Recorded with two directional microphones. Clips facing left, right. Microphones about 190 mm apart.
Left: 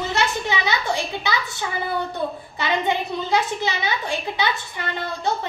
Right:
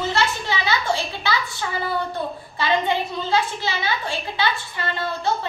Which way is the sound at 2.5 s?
20° left (ahead or behind).